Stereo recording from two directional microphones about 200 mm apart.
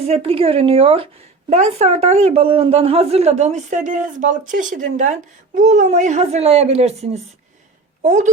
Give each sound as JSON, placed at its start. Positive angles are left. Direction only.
{"t": 0.0, "sound": "a woman's voice", "side_deg": -30}